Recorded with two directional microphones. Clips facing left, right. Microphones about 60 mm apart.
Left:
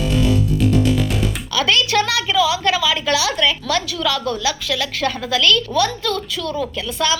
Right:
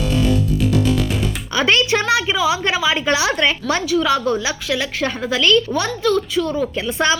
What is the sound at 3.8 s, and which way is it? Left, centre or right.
A woman's voice, centre.